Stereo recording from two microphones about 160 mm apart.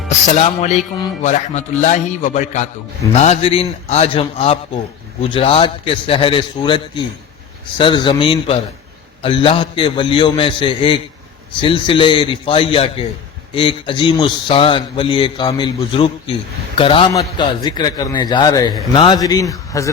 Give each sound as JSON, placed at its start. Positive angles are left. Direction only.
{"t": 0.3, "sound": "a man's voice", "side_deg": 45}